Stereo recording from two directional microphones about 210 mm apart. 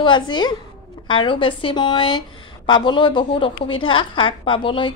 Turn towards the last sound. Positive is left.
turn(degrees=25)  # may be behind; listen again after turning